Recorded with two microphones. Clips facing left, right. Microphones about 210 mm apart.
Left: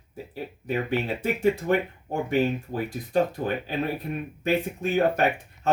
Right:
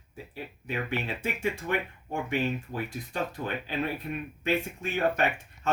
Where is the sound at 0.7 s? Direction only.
40° left (ahead or behind).